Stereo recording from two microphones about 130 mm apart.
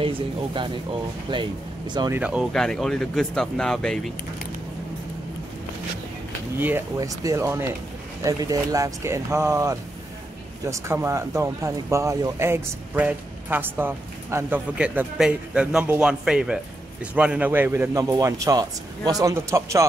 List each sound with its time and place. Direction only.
0.0 s speech: 45° right (ahead or behind)
2.1 s speech: 10° right (ahead or behind)
2.5 s speech: 5° left (ahead or behind)
7.0 s a man's voice: 25° right (ahead or behind)